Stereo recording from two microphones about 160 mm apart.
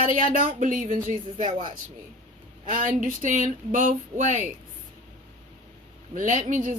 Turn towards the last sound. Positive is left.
turn(degrees=-50)  # may be behind; listen again after turning